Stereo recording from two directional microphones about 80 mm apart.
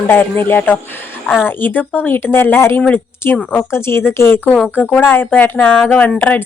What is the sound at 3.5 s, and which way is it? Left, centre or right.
A woman's voice, left.